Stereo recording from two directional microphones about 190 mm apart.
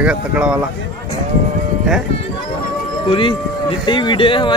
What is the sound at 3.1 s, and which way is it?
Speech, 25° left (ahead or behind).